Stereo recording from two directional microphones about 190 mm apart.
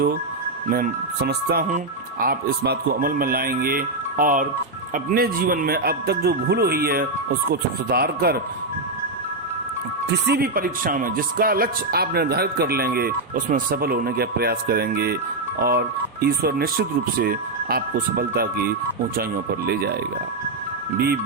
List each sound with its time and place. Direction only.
0.7 s speech: 55° right (ahead or behind)
10.2 s speech: 55° right (ahead or behind)